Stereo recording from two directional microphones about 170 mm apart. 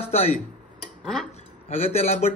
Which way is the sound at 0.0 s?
35° left (ahead or behind).